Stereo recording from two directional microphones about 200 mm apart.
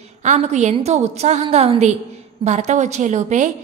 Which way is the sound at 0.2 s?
35° right (ahead or behind).